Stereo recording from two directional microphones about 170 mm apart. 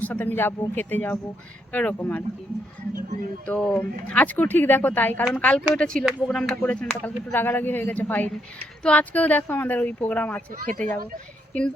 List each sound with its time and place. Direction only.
0.0 s speech: 10° left (ahead or behind)
3.4 s speech: 5° left (ahead or behind)